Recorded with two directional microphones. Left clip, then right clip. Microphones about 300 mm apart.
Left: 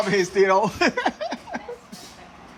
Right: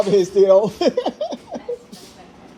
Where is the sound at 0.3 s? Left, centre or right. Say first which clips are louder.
Right 6 dB; centre.